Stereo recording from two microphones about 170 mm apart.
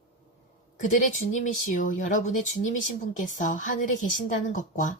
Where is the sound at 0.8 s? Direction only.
50° left (ahead or behind).